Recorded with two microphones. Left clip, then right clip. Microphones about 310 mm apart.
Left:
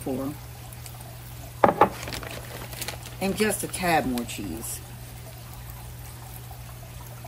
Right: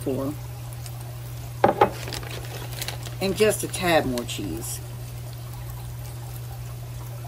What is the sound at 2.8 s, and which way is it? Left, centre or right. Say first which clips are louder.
Speech: right 2 dB; centre.